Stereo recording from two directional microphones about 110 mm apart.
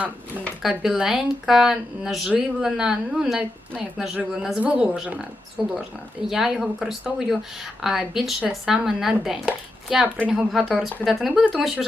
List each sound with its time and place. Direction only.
0.6 s a woman's voice: 5° right (ahead or behind)